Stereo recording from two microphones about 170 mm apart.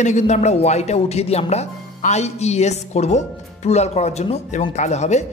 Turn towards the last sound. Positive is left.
turn(degrees=40)  # may be behind; listen again after turning